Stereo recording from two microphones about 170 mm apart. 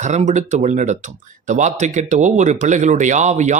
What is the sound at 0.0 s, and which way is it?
Speech, 45° right (ahead or behind).